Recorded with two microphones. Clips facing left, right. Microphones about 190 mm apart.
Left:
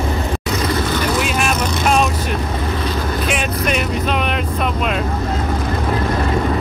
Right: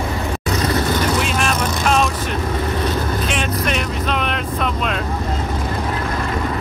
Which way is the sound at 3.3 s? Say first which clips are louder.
Left 2 dB; 5° left (ahead or behind).